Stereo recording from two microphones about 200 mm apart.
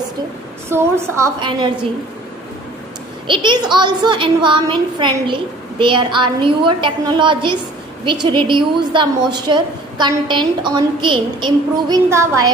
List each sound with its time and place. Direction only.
0.7 s a woman's voice: 10° right (ahead or behind)
3.2 s a woman's voice: 25° right (ahead or behind)